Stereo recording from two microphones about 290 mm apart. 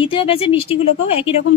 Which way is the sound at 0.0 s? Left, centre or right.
Centre.